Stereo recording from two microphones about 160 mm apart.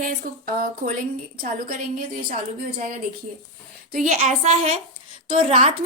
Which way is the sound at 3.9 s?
45° right (ahead or behind).